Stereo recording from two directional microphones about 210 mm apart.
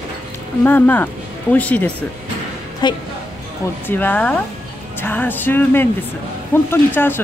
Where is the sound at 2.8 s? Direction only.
20° left (ahead or behind).